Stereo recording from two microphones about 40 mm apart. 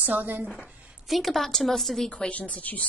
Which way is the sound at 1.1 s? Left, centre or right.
Centre.